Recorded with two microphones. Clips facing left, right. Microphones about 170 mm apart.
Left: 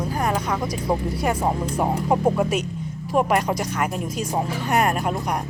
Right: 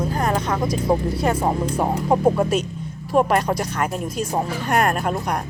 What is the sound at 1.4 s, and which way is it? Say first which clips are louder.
Speech: right 2 dB; centre (ahead or behind).